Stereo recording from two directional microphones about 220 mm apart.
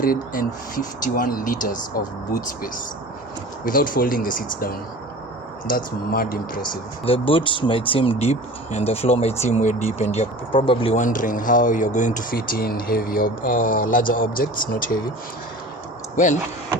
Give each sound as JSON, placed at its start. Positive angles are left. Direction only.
{"t": 0.0, "sound": "speech", "side_deg": 40}
{"t": 3.7, "sound": "speech", "side_deg": 40}
{"t": 6.6, "sound": "speech", "side_deg": 25}
{"t": 16.1, "sound": "speech", "side_deg": 35}